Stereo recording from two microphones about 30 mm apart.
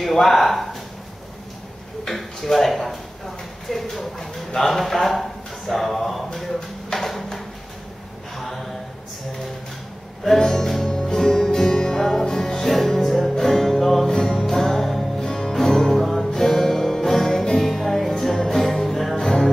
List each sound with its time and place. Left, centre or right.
0.0 s speech: centre
2.0 s speech: centre
6.4 s a sound: centre
10.4 s music: centre
15.9 s music: centre
19.1 s music: centre